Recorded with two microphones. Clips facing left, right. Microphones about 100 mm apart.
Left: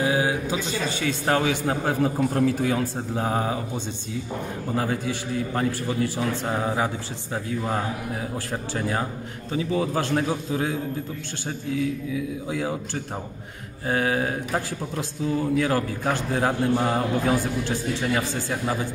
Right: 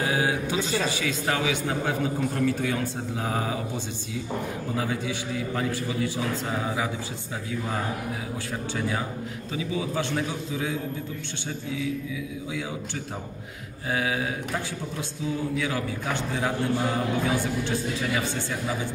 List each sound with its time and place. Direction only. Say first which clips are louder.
0.0 s a man's voice: left 2 dB; 25° left (ahead or behind)
4.7 s a man's voice: left 4 dB; 40° left (ahead or behind)
8.7 s a man's voice: left 3 dB; 45° left (ahead or behind)
12.1 s a man's voice: left 5 dB; 45° left (ahead or behind)
13.8 s a man's voice: left 4 dB; 40° left (ahead or behind)